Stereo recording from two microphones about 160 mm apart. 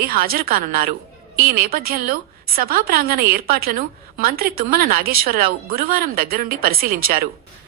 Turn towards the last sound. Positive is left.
turn(degrees=-65)  # may be behind; listen again after turning